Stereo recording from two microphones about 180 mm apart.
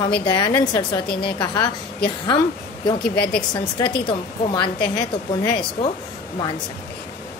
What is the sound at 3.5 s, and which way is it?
A woman's voice, 25° left (ahead or behind).